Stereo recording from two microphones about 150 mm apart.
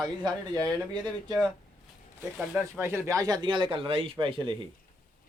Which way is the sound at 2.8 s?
20° right (ahead or behind).